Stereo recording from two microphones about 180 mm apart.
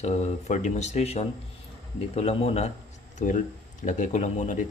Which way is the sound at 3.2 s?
50° left (ahead or behind).